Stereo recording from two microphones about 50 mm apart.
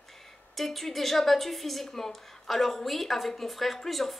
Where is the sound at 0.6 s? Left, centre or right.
Centre.